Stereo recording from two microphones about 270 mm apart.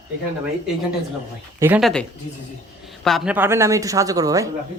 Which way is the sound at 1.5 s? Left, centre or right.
Centre.